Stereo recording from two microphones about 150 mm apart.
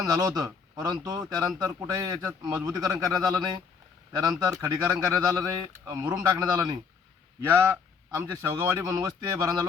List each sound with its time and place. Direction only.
0.0 s speech: 25° right (ahead or behind)